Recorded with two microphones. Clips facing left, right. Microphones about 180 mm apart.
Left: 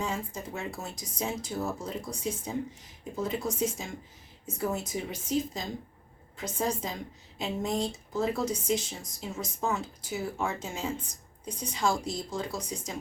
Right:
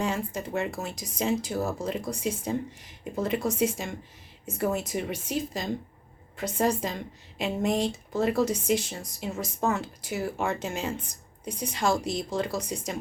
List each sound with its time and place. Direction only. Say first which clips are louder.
0.0 s speech: right 4 dB; 70° right (ahead or behind)